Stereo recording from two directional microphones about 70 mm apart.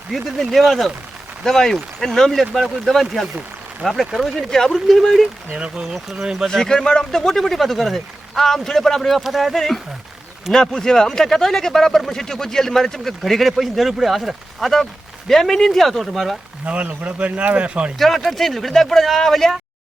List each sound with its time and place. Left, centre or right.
0.1 s speech: centre
5.5 s speech: centre
5.8 s speech: centre
16.6 s speech: right
17.9 s speech: centre